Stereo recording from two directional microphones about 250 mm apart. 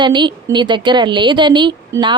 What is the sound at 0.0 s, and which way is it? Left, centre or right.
A woman's voice, centre.